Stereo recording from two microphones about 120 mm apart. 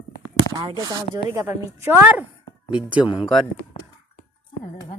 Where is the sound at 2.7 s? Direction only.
10° right (ahead or behind).